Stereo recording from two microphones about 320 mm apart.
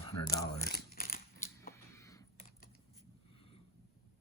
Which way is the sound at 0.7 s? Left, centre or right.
Left.